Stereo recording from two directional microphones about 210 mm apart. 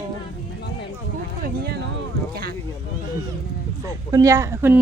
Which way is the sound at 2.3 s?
45° right (ahead or behind).